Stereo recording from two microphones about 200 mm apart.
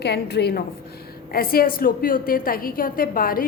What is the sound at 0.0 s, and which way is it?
A woman's voice, 55° left (ahead or behind).